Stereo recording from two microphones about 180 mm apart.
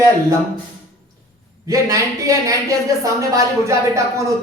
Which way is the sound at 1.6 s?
20° right (ahead or behind).